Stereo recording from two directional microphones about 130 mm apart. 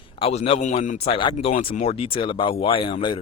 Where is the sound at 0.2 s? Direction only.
50° left (ahead or behind).